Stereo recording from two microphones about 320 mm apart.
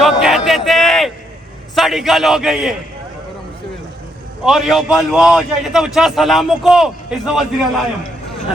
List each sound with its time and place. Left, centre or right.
0.0 s a sound: centre
1.7 s a man's voice: centre
4.4 s a man's voice: centre